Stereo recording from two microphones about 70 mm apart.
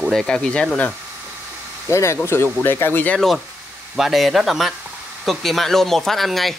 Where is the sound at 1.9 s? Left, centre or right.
Left.